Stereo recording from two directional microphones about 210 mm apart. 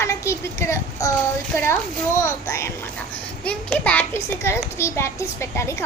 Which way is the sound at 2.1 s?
15° left (ahead or behind).